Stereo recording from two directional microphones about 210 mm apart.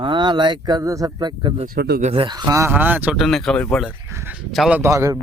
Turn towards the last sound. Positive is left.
turn(degrees=-15)  # may be behind; listen again after turning